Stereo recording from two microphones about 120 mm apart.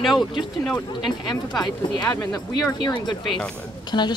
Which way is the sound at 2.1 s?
30° left (ahead or behind).